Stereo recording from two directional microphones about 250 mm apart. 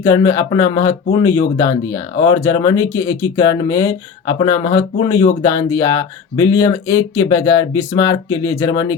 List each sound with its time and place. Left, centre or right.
0.0 s speech: centre